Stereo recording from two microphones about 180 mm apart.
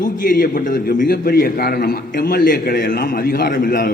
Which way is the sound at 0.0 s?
50° left (ahead or behind).